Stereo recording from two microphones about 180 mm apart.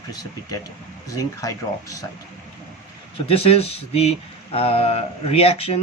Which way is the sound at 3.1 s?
30° left (ahead or behind).